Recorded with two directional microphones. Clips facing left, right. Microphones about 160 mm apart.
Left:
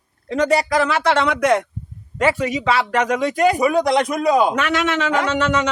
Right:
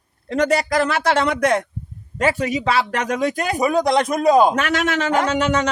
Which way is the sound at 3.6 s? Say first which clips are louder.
Left 1 dB; 40° right (ahead or behind).